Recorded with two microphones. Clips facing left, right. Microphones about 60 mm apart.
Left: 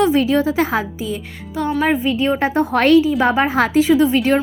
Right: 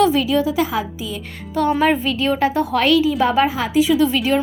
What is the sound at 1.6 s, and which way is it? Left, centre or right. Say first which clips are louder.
Speech: right 3 dB; centre.